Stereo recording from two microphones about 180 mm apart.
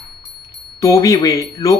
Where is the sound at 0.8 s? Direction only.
15° left (ahead or behind).